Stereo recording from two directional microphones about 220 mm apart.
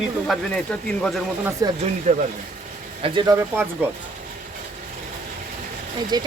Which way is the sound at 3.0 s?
20° right (ahead or behind).